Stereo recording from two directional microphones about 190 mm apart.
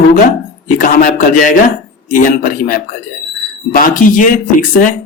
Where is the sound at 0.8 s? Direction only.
45° left (ahead or behind).